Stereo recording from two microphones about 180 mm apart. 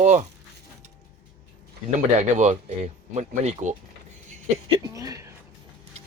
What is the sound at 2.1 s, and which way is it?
Speech, 40° right (ahead or behind).